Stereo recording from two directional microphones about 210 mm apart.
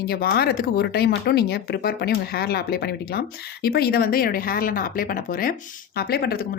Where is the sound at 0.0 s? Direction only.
45° left (ahead or behind).